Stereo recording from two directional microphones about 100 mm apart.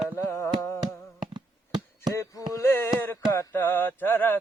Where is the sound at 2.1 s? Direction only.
30° left (ahead or behind).